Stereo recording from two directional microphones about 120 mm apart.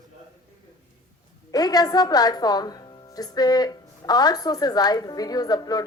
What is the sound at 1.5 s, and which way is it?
A woman's voice, 35° left (ahead or behind).